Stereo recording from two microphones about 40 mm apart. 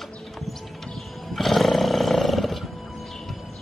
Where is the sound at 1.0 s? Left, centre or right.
Centre.